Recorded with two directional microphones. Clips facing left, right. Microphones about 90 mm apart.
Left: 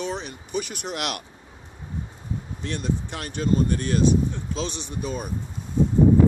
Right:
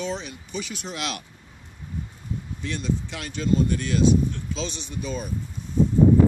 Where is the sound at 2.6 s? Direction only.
50° left (ahead or behind).